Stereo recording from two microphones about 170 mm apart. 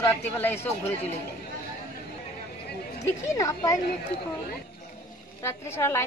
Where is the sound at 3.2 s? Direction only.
15° left (ahead or behind).